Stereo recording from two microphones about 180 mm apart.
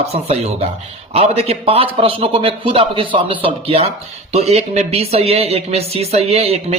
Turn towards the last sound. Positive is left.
turn(degrees=-35)  # may be behind; listen again after turning